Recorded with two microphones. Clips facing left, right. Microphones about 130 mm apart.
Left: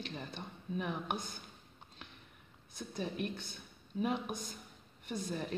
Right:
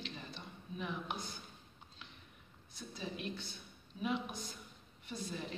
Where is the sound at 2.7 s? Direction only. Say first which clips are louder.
Left 5 dB; 55° left (ahead or behind).